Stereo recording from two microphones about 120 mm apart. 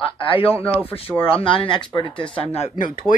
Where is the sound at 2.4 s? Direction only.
60° left (ahead or behind); by 2.9 s 75° left (ahead or behind).